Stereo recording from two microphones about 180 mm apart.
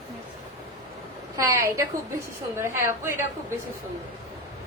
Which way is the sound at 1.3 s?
15° right (ahead or behind).